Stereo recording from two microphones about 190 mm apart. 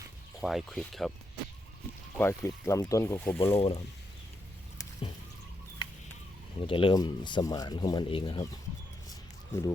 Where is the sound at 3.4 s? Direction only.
30° left (ahead or behind).